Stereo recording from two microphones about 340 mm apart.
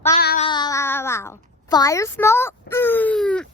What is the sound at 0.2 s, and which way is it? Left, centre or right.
Child singing, left.